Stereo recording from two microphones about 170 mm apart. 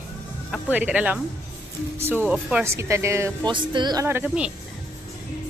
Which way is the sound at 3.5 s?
25° right (ahead or behind).